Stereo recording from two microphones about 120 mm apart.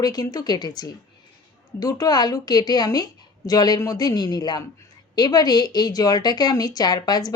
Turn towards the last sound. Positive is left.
turn(degrees=35)  # may be behind; listen again after turning